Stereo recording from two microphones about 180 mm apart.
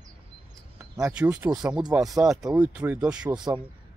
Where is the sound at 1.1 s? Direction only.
10° right (ahead or behind).